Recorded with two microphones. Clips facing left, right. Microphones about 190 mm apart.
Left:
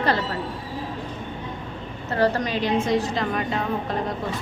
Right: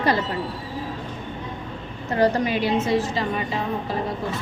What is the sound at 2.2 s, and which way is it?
A woman's voice, 10° right (ahead or behind).